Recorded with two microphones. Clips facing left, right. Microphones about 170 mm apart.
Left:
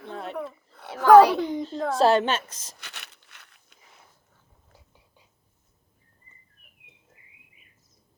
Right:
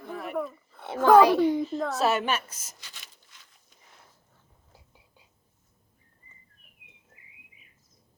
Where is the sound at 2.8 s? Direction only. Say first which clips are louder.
Left 6 dB; 70° left (ahead or behind).